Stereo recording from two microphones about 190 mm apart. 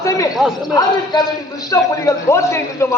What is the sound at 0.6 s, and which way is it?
A man's voice, 20° left (ahead or behind).